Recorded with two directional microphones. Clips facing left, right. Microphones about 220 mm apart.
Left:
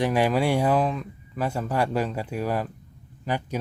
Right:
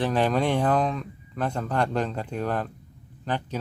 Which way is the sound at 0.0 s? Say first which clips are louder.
Left 1 dB; 10° left (ahead or behind).